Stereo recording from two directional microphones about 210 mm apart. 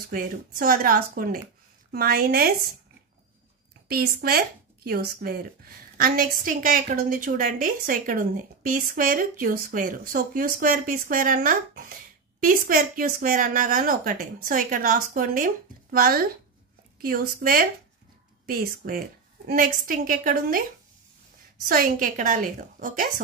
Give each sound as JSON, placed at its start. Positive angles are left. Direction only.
{"t": 0.1, "sound": "a woman's voice", "side_deg": -45}
{"t": 3.9, "sound": "a woman's voice", "side_deg": -45}
{"t": 21.6, "sound": "a woman's voice", "side_deg": -45}